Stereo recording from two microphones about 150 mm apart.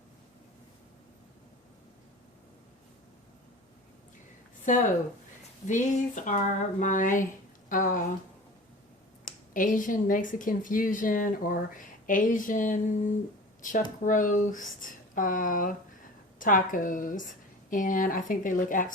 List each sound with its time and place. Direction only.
4.7 s speech: 55° left (ahead or behind)
9.5 s speech: 65° left (ahead or behind)